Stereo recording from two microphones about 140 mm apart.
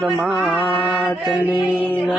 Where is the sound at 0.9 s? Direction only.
10° left (ahead or behind).